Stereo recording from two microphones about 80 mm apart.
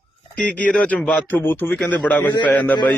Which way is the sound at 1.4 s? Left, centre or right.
Left.